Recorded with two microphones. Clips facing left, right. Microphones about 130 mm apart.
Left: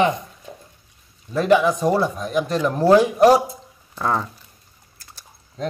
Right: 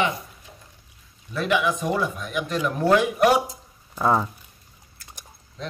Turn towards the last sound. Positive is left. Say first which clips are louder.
# left 7 dB
turn(degrees=45)  # may be behind; listen again after turning